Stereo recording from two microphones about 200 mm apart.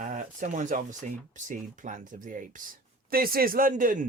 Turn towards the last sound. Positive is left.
turn(degrees=-45)  # may be behind; listen again after turning